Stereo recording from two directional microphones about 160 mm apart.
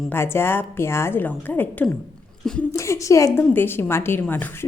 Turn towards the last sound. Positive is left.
turn(degrees=15)  # may be behind; listen again after turning